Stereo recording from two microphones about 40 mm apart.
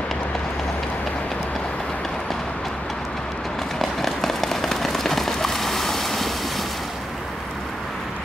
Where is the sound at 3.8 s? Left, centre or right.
Centre.